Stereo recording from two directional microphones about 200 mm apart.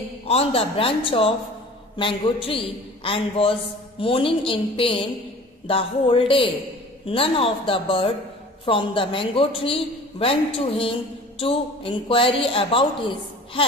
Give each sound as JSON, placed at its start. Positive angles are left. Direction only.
{"t": 0.3, "sound": "a man's voice", "side_deg": 30}